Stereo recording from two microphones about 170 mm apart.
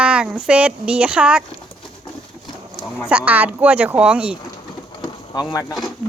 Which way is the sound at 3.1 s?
10° right (ahead or behind).